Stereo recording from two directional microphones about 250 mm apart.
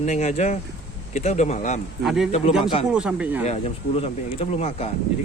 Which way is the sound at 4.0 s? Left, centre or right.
Left.